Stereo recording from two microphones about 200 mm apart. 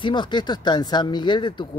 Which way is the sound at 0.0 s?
25° left (ahead or behind).